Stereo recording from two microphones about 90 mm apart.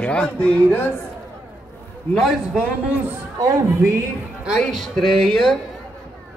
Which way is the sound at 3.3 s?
35° right (ahead or behind).